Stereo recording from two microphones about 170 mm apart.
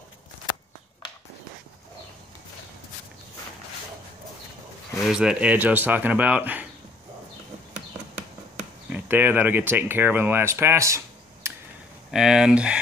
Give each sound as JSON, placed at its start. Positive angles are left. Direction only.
{"t": 5.0, "sound": "speech", "side_deg": -5}
{"t": 8.9, "sound": "speech", "side_deg": -10}
{"t": 11.4, "sound": "a sound", "side_deg": -15}
{"t": 12.1, "sound": "speech", "side_deg": -5}